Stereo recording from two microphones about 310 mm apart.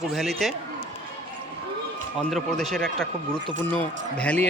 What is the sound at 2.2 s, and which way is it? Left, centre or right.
Speech, centre.